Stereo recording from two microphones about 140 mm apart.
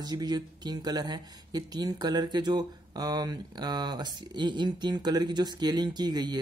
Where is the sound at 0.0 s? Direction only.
30° right (ahead or behind).